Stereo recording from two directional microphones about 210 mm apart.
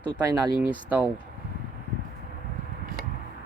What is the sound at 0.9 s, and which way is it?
Speech, 5° right (ahead or behind).